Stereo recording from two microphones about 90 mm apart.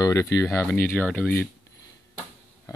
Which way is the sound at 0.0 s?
35° left (ahead or behind).